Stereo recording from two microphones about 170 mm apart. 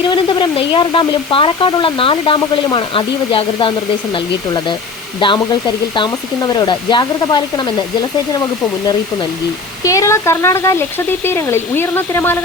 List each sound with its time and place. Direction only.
0.0 s speech: 25° left (ahead or behind)
9.8 s speech: 20° left (ahead or behind)